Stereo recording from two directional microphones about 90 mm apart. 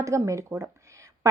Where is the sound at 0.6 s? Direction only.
35° right (ahead or behind).